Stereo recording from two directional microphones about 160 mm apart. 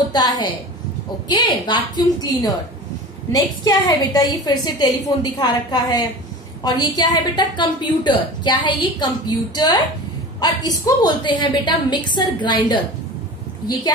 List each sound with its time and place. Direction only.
0.1 s a woman's voice: 25° left (ahead or behind)